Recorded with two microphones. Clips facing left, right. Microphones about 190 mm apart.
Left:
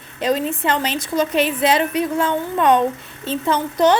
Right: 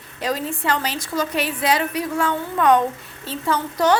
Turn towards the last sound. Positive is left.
turn(degrees=20)  # may be behind; listen again after turning